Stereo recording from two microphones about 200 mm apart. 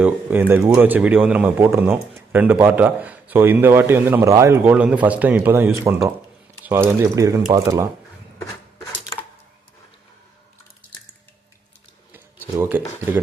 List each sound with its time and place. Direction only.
0.0 s speech: 10° right (ahead or behind)
12.5 s speech: 10° right (ahead or behind)